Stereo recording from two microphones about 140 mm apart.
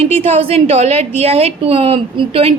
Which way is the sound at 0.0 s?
45° right (ahead or behind).